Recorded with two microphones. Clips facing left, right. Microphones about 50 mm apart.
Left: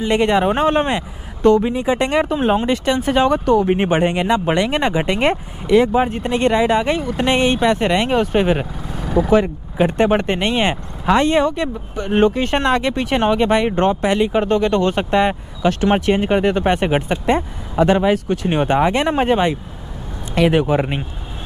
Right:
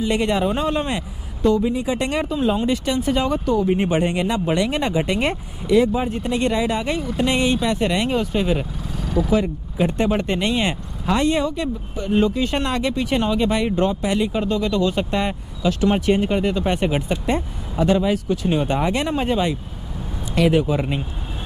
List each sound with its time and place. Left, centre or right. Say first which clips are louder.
0.0 s speech: left 4 dB; left
9.3 s speech: left 5 dB; left